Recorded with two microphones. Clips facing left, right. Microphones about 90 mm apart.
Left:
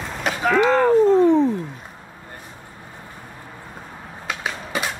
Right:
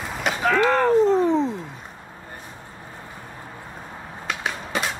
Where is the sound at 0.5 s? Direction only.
15° left (ahead or behind).